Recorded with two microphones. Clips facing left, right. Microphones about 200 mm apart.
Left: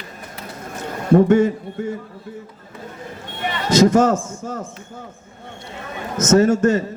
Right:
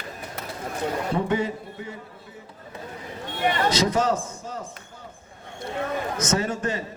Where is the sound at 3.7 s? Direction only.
45° left (ahead or behind).